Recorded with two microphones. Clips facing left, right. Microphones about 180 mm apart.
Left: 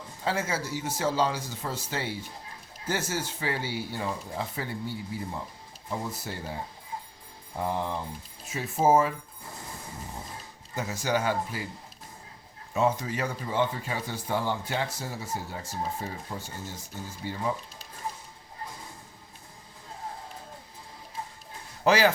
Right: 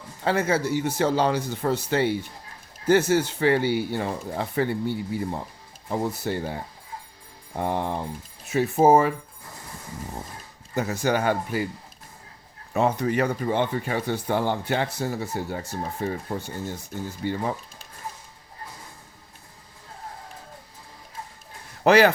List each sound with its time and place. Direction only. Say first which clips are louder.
0.3 s speech: right 7 dB; 60° right (ahead or behind)
7.5 s speech: right 4 dB; 70° right (ahead or behind)
10.8 s speech: right 5 dB; 60° right (ahead or behind)
12.7 s speech: right 4 dB; 60° right (ahead or behind)
21.8 s speech: right 5 dB; 60° right (ahead or behind)